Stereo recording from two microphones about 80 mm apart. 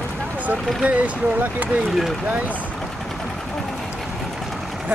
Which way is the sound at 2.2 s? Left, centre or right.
Centre.